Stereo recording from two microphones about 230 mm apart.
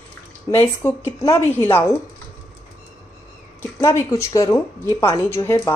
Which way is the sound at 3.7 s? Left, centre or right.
Centre.